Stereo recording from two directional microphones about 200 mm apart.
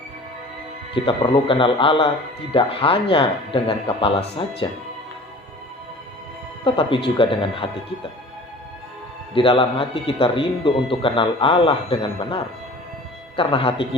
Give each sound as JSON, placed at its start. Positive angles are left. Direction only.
{"t": 0.9, "sound": "speech", "side_deg": 25}
{"t": 6.7, "sound": "speech", "side_deg": 25}
{"t": 9.3, "sound": "speech", "side_deg": 25}